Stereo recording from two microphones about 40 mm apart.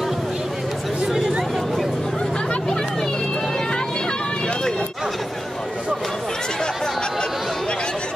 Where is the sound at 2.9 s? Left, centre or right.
Centre.